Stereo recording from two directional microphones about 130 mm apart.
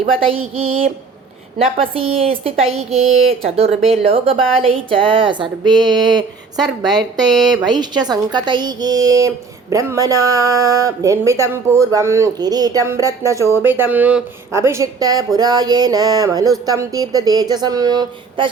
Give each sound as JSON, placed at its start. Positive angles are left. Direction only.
{"t": 0.2, "sound": "a woman's voice", "side_deg": -45}
{"t": 14.5, "sound": "speech", "side_deg": -20}